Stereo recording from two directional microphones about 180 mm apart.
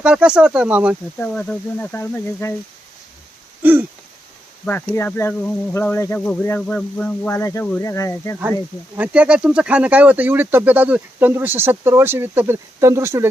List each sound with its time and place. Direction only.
0.0 s speech: 5° right (ahead or behind)
1.2 s speech: 5° left (ahead or behind)
3.6 s wheeze: 10° right (ahead or behind)
4.6 s speech: 10° left (ahead or behind)
9.0 s speech: 5° right (ahead or behind)